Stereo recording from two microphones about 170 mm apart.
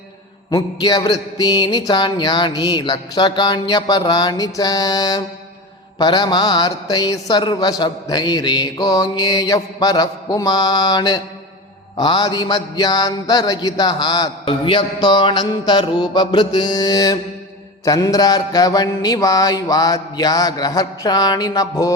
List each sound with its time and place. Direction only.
0.5 s mantra: 25° left (ahead or behind)